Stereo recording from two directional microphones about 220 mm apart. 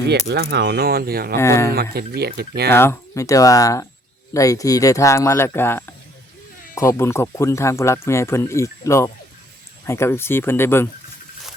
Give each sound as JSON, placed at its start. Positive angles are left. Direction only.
{"t": 0.1, "sound": "speech", "side_deg": -50}
{"t": 1.4, "sound": "speech", "side_deg": 10}
{"t": 1.7, "sound": "speech", "side_deg": -45}
{"t": 2.6, "sound": "speech", "side_deg": 10}